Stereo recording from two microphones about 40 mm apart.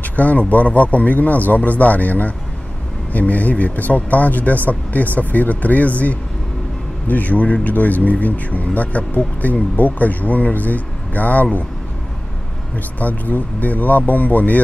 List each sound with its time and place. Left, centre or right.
0.1 s speech: left
13.0 s speech: left